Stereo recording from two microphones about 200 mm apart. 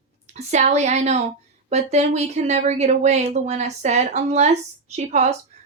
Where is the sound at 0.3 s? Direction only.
35° right (ahead or behind).